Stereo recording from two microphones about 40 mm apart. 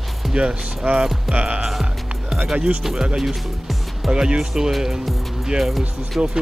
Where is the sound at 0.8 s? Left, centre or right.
Right.